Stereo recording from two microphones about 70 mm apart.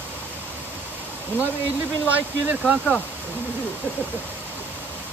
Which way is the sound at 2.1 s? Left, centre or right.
Right.